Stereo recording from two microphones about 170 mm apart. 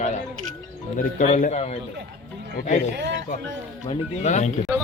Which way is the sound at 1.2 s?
45° left (ahead or behind).